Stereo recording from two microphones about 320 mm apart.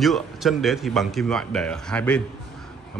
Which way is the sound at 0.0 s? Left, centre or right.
Centre.